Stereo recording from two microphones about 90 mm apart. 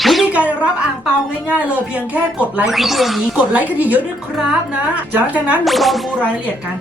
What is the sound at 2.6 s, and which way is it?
Speech, centre (ahead or behind).